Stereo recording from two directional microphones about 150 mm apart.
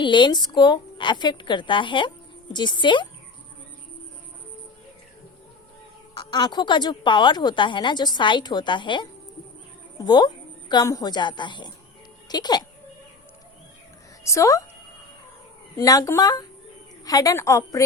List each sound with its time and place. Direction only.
0.0 s a woman's voice: 30° left (ahead or behind)
6.1 s a woman's voice: 30° left (ahead or behind)
14.3 s a woman's voice: 20° left (ahead or behind)
15.8 s a woman's voice: 25° left (ahead or behind)